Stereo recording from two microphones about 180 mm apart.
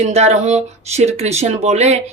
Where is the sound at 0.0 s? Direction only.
35° right (ahead or behind).